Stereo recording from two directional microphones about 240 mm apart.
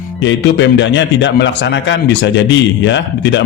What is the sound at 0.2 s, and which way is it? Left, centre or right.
A man's voice, left.